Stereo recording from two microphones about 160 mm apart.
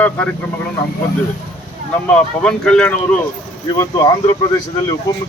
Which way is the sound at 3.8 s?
20° left (ahead or behind).